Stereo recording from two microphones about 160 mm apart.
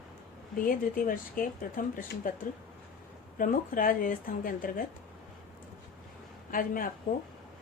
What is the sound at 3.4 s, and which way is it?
Speech, 60° left (ahead or behind).